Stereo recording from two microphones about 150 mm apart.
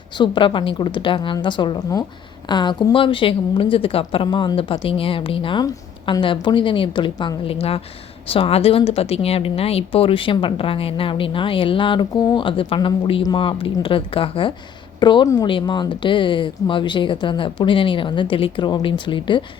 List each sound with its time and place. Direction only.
0.2 s a woman's voice: 35° left (ahead or behind)